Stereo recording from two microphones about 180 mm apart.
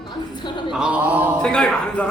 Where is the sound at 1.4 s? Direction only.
5° left (ahead or behind).